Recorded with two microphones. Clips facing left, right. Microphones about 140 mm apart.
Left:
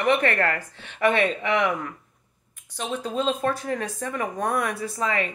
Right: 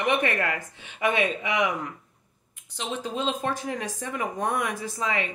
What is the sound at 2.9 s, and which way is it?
A man's voice, 20° right (ahead or behind).